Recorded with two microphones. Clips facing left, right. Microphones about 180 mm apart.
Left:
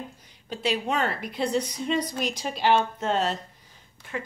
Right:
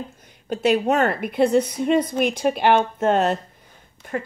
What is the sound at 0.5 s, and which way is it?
A woman's voice, 45° right (ahead or behind).